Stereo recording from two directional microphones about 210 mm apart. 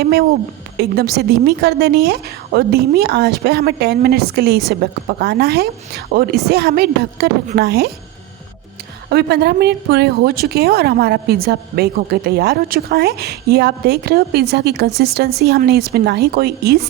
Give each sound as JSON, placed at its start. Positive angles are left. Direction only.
{"t": 0.0, "sound": "a woman's voice", "side_deg": -50}
{"t": 9.0, "sound": "a woman's voice", "side_deg": -50}